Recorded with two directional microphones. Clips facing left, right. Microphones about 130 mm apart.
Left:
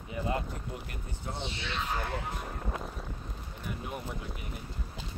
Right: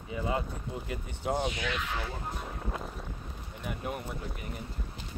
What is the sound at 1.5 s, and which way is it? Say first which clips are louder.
Speech: right 1 dB; 30° left (ahead or behind).